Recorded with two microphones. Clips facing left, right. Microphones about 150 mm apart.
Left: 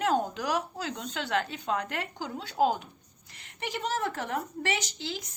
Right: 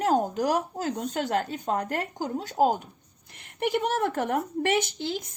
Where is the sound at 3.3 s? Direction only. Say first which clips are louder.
Right 10 dB; 55° right (ahead or behind).